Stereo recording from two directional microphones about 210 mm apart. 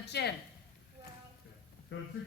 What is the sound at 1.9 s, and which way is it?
Speech, 55° left (ahead or behind).